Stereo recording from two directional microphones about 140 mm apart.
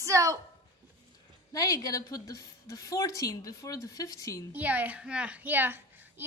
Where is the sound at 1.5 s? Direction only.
25° left (ahead or behind).